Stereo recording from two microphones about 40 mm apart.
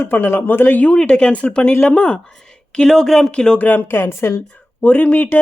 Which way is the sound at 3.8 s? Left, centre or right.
Left.